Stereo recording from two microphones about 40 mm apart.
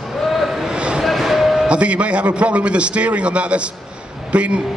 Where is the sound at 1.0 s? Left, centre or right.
Centre.